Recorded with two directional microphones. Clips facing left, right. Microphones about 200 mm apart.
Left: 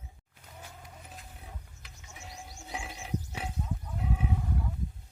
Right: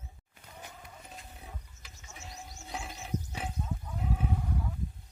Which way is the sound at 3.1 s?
40° right (ahead or behind).